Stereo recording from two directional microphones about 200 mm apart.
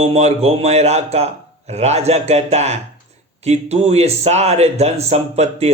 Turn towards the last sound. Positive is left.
turn(degrees=-30)  # may be behind; listen again after turning